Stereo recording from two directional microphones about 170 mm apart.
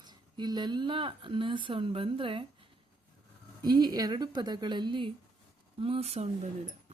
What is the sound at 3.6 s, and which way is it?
Speech, 25° right (ahead or behind).